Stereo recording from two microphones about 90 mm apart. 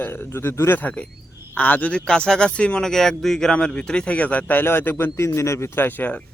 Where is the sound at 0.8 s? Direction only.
15° left (ahead or behind).